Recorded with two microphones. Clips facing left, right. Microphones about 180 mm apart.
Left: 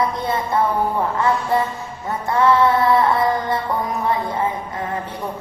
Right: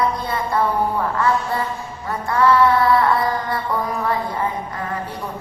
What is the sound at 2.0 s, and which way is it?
Mantra, 20° left (ahead or behind).